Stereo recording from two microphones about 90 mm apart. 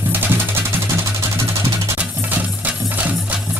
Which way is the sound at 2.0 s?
15° right (ahead or behind).